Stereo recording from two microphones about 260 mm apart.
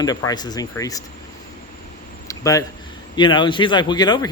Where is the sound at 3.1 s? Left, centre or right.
Centre.